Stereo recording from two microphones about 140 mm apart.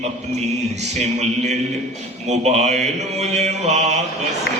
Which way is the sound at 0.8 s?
55° right (ahead or behind).